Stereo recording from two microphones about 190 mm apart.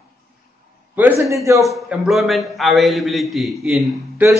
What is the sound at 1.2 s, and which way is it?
Speech, 15° right (ahead or behind).